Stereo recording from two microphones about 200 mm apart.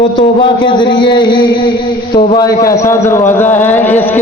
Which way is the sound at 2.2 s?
20° left (ahead or behind).